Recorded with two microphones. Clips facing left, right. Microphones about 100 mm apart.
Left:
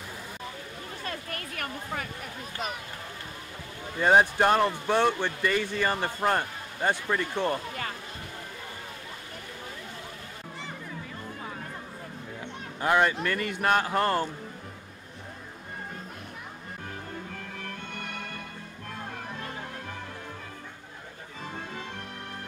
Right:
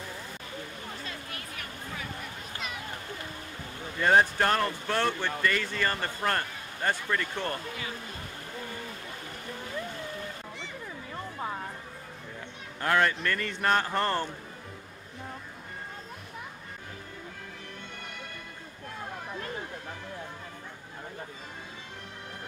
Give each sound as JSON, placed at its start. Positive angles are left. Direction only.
{"t": 1.0, "sound": "a sound", "side_deg": 55}
{"t": 4.0, "sound": "speech", "side_deg": 15}
{"t": 12.8, "sound": "speech", "side_deg": 15}